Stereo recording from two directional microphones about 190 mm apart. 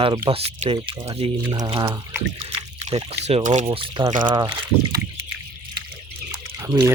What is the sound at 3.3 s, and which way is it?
Speech, 35° right (ahead or behind).